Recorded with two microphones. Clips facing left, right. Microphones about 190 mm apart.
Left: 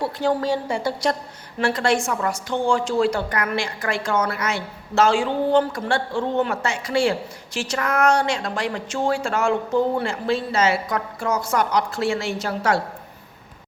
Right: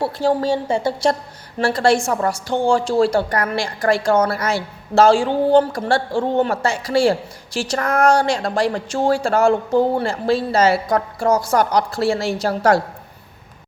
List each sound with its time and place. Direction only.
0.0 s a woman's voice: 30° right (ahead or behind)